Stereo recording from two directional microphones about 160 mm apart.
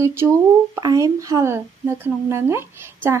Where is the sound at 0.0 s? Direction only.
15° right (ahead or behind).